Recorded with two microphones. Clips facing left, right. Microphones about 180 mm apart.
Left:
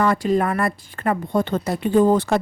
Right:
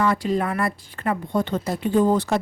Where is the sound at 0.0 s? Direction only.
50° left (ahead or behind).